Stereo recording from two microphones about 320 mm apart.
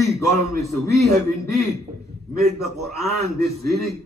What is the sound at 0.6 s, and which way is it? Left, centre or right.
Speech, centre.